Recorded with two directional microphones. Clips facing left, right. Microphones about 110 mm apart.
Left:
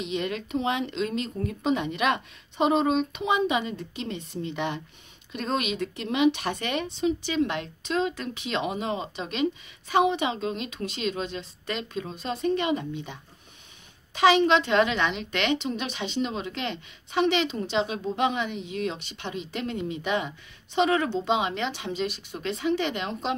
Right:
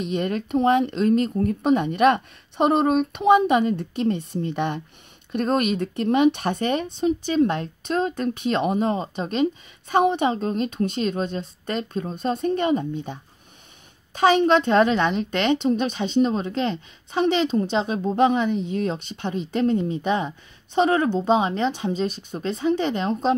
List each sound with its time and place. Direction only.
0.0 s speech: 45° right (ahead or behind)